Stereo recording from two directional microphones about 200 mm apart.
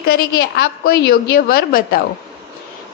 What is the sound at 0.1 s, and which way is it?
A woman's voice, 55° left (ahead or behind).